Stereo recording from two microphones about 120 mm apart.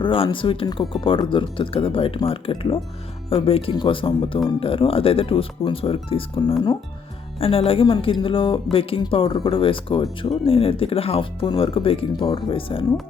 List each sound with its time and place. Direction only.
0.0 s speech: 45° left (ahead or behind)